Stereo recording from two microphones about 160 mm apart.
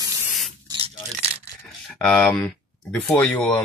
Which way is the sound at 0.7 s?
35° right (ahead or behind).